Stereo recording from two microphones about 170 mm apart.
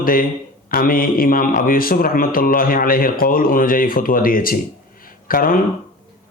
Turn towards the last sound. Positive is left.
turn(degrees=60)  # may be behind; listen again after turning